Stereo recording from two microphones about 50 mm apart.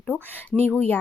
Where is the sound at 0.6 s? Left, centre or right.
Left.